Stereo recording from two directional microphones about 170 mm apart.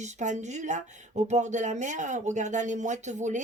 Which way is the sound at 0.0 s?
45° right (ahead or behind).